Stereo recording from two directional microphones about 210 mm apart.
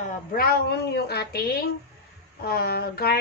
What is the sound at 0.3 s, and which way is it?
A woman's voice, 45° left (ahead or behind).